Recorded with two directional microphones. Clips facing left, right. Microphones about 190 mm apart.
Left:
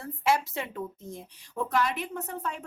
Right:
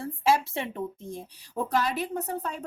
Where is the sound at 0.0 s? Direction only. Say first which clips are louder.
Right 2 dB; 30° right (ahead or behind).